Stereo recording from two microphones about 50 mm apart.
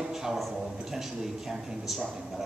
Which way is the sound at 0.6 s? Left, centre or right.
Centre.